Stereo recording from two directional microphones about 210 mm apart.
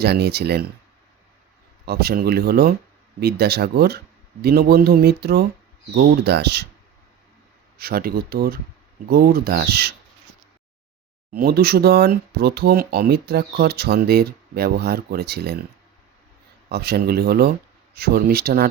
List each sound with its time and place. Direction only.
0.0 s speech: 50° right (ahead or behind)
1.8 s speech: 50° right (ahead or behind)
7.8 s speech: 45° right (ahead or behind)
11.3 s speech: 45° right (ahead or behind)
16.6 s speech: 50° right (ahead or behind)